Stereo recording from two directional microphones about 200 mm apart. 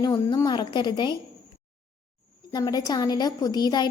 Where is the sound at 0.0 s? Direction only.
20° left (ahead or behind).